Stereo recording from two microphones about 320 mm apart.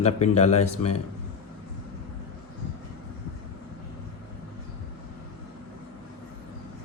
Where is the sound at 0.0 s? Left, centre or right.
Centre.